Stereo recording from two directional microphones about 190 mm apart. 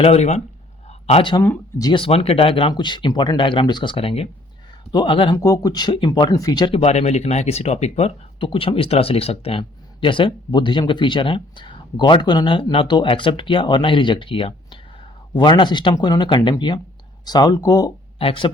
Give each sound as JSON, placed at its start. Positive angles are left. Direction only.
{"t": 0.0, "sound": "speech", "side_deg": 35}
{"t": 0.9, "sound": "a sound", "side_deg": 35}
{"t": 1.4, "sound": "speech", "side_deg": 15}
{"t": 1.9, "sound": "speech", "side_deg": 30}